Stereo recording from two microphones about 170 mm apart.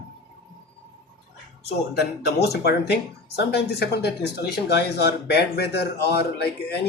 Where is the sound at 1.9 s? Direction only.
70° left (ahead or behind).